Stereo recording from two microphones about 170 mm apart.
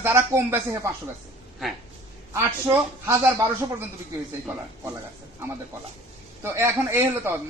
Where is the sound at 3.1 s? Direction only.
20° right (ahead or behind).